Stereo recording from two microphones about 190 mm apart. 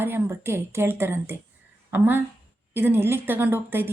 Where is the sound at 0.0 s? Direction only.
10° right (ahead or behind).